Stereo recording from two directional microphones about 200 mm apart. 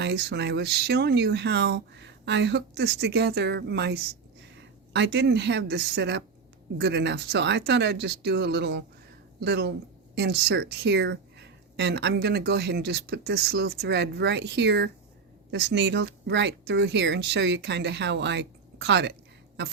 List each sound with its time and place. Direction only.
0.0 s speech: 55° right (ahead or behind)